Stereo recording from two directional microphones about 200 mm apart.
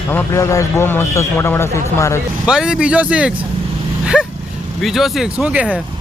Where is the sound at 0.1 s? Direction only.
10° left (ahead or behind).